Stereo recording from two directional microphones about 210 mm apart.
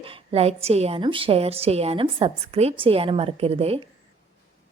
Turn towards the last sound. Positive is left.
turn(degrees=-30)  # may be behind; listen again after turning